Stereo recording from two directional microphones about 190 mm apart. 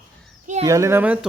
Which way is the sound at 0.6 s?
15° right (ahead or behind).